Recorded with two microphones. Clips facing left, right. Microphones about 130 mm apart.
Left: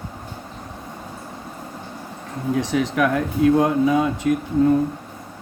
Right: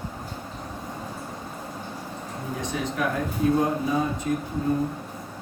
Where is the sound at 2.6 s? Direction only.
90° left.